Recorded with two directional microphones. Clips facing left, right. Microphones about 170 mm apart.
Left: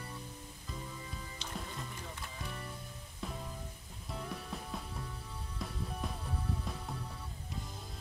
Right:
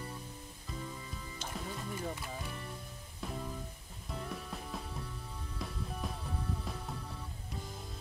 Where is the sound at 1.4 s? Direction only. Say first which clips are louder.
Right 4 dB; 50° right (ahead or behind).